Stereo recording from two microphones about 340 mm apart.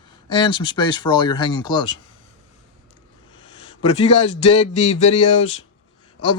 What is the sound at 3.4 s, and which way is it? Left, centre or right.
Speech, centre.